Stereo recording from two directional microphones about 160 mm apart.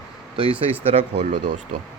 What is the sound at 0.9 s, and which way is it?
Speech, 40° right (ahead or behind).